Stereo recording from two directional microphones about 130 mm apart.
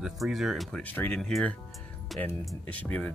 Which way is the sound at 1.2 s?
5° left (ahead or behind).